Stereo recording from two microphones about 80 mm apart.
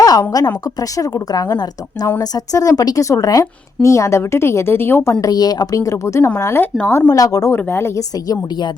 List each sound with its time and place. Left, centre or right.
0.0 s a woman's voice: left
3.4 s a woman's voice: left
5.2 s a woman's voice: left
7.1 s a woman's voice: left
7.5 s a woman's voice: left
7.9 s a woman's voice: left
8.4 s speech: left